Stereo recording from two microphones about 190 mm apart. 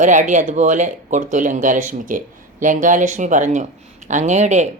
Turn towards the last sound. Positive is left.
turn(degrees=-40)  # may be behind; listen again after turning